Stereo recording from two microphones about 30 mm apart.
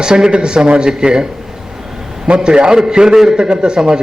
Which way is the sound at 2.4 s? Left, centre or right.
Right.